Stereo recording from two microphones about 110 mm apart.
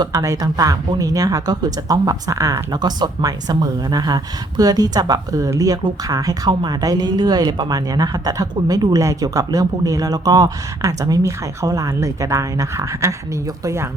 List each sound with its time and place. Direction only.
0.0 s speech: 35° right (ahead or behind)
6.5 s a woman's voice: 45° right (ahead or behind); by 13.1 s 25° right (ahead or behind)